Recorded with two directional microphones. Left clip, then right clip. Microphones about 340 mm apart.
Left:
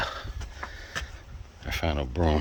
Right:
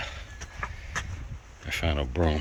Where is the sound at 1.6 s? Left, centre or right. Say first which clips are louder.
Even; centre.